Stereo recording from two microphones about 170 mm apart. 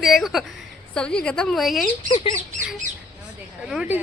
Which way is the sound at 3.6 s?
5° right (ahead or behind).